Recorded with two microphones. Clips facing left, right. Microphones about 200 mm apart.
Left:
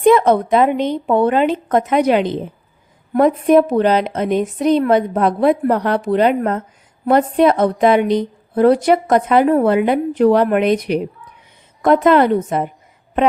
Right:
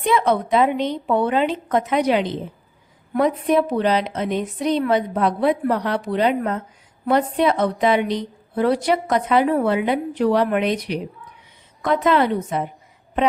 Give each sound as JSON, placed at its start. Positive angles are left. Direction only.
{"t": 0.0, "sound": "a woman's voice", "side_deg": 45}